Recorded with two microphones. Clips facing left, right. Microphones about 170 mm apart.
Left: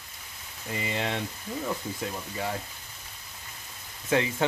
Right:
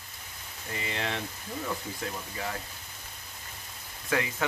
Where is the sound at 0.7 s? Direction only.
20° left (ahead or behind).